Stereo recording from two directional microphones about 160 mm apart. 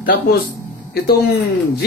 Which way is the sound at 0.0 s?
70° left (ahead or behind).